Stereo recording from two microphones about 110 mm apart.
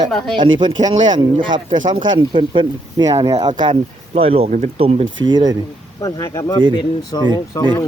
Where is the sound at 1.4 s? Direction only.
45° right (ahead or behind).